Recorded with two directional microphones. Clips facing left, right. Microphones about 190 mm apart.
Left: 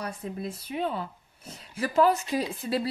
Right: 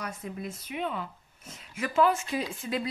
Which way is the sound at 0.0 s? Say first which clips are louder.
Left 3 dB; 30° left (ahead or behind).